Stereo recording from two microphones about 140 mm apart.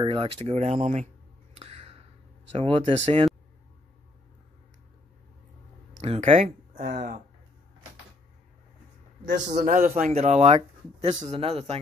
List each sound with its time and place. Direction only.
0.0 s a sound: 40° right (ahead or behind)
2.5 s speech: 45° right (ahead or behind)
6.0 s speech: 45° right (ahead or behind); by 7.2 s 85° right
9.2 s speech: 65° right (ahead or behind); by 11.8 s 45° right (ahead or behind)